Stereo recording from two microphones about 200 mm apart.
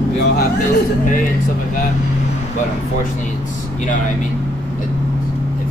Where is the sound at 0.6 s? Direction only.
40° left (ahead or behind).